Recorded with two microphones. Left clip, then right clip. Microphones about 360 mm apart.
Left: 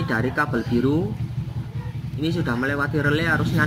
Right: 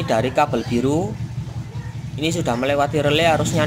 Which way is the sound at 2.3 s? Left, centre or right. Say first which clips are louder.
Right 4 dB; right.